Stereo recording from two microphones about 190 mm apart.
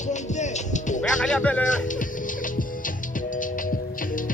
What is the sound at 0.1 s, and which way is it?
Music, 40° left (ahead or behind).